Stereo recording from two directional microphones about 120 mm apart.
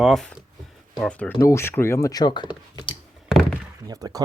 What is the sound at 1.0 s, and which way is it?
Speech, 10° left (ahead or behind).